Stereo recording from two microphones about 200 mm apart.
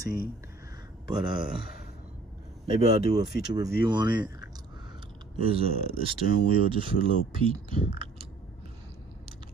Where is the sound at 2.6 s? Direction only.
30° right (ahead or behind).